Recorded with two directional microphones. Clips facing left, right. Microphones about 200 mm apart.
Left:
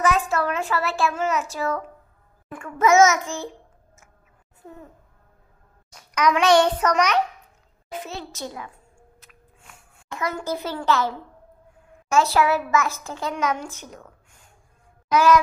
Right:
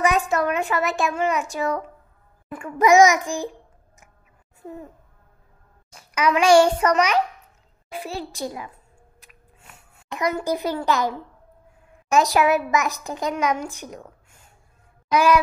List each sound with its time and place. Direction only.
0.3 s a child's voice: 15° right (ahead or behind)
5.9 s a woman's voice: 5° right (ahead or behind)
8.3 s a woman's voice: 15° right (ahead or behind)
9.2 s a sound: 10° right (ahead or behind)
10.0 s a woman's voice: 15° right (ahead or behind)